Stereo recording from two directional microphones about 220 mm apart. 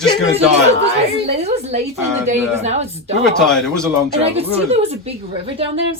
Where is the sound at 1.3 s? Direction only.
30° right (ahead or behind).